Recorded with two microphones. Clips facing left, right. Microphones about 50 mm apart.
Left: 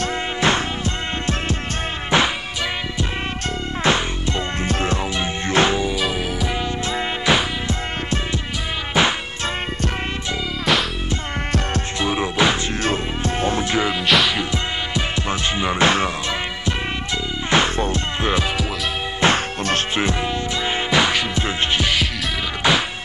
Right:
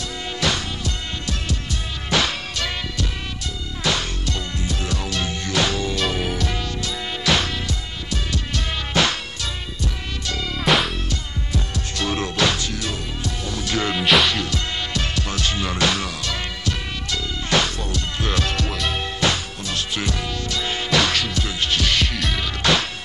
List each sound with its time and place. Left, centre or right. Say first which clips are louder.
2.0 s music: left 3 dB; left
3.8 s music: left 4 dB; left
4.6 s music: left 6 dB; left
5.1 s music: left 1 dB; left
5.8 s music: left 2 dB; centre
6.8 s music: left 4 dB; left
9.0 s music: left 2 dB; centre
10.6 s music: right 1 dB; centre
12.0 s music: left 2 dB; centre
12.8 s music: left 6 dB; left
13.9 s music: right 3 dB; centre
14.3 s music: left 2 dB; centre
17.5 s music: left 4 dB; left
20.0 s music: left 5 dB; left